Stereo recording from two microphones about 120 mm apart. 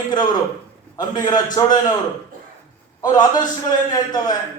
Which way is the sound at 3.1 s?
35° left (ahead or behind).